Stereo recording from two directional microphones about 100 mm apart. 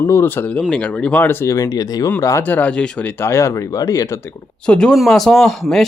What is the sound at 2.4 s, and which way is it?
Speech, 15° left (ahead or behind).